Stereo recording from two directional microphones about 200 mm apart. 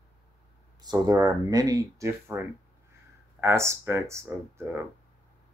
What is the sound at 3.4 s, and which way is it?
Speech, 15° right (ahead or behind).